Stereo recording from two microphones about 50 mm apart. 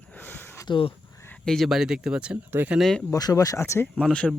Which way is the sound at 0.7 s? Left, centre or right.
Left.